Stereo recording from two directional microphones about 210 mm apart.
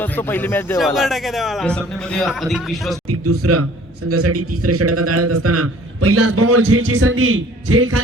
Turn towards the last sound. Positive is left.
turn(degrees=-90)